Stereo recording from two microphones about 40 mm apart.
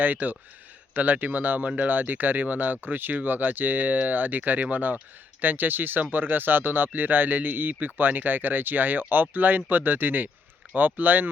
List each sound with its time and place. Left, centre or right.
0.0 s speech: right